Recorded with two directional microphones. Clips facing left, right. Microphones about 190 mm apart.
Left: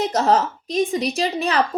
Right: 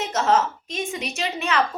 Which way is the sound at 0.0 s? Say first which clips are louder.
Left 3 dB; 35° left (ahead or behind).